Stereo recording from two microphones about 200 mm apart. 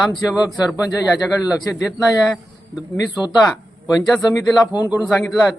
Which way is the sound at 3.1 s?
20° left (ahead or behind).